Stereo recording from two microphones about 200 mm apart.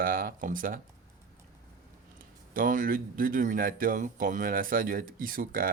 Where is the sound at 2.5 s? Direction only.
45° right (ahead or behind).